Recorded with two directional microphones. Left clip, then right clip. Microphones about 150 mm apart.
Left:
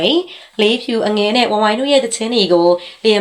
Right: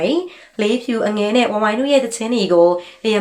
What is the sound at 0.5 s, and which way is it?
Speech, 15° left (ahead or behind).